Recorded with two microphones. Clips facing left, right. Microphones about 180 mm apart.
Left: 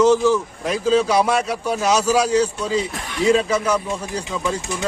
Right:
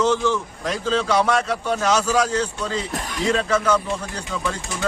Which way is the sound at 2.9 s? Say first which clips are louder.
Even; 40° right (ahead or behind).